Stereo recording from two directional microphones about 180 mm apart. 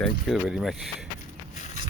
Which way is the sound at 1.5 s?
40° left (ahead or behind).